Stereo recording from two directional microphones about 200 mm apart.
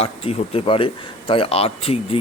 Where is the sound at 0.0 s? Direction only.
30° left (ahead or behind).